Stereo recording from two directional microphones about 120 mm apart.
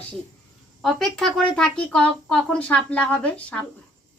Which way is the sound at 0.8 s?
Centre (ahead or behind).